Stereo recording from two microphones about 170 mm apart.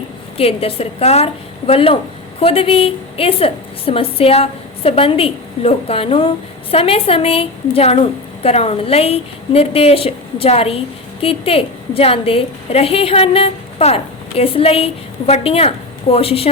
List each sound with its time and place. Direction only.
0.3 s a woman's voice: 35° left (ahead or behind)